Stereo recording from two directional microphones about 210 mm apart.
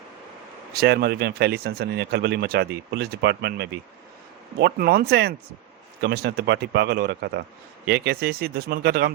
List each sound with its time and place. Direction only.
0.7 s speech: 50° right (ahead or behind)